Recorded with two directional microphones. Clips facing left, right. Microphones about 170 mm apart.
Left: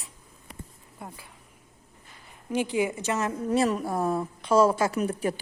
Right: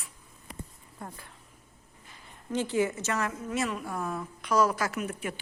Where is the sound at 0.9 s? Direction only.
10° left (ahead or behind).